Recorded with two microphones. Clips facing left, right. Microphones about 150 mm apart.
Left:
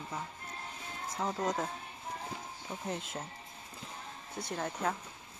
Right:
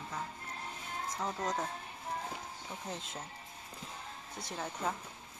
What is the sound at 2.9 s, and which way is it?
Speech, 5° left (ahead or behind).